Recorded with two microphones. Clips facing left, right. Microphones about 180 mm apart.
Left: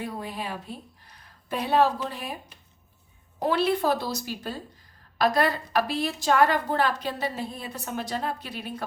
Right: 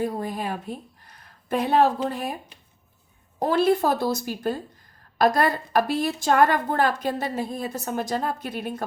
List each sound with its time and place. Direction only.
0.0 s a woman's voice: 45° right (ahead or behind)
3.4 s a woman's voice: 45° right (ahead or behind)